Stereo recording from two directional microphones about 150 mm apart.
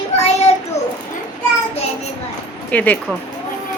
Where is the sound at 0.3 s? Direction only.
45° left (ahead or behind).